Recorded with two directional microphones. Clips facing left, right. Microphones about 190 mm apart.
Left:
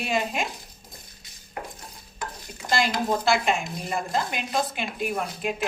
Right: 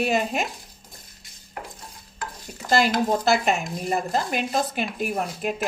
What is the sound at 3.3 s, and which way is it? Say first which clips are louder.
A woman's voice: right 2 dB; 40° right (ahead or behind).